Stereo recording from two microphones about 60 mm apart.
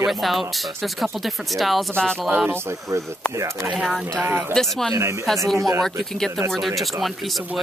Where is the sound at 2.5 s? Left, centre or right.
Right.